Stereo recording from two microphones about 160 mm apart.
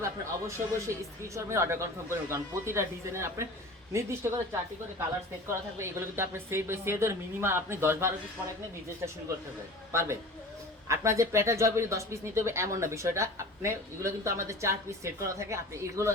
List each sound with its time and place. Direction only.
0.0 s speech: 20° right (ahead or behind)
5.5 s speech: 15° right (ahead or behind)
9.9 s speech: 15° right (ahead or behind)